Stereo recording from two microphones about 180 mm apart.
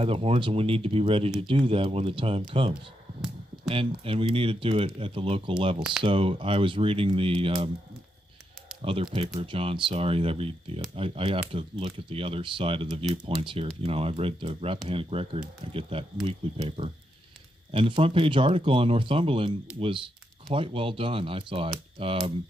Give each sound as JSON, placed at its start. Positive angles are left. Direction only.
{"t": 0.0, "sound": "speech", "side_deg": -30}
{"t": 8.8, "sound": "speech", "side_deg": -30}